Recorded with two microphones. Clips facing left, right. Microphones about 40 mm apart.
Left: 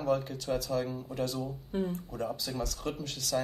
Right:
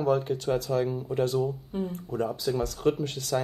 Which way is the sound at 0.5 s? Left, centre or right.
Right.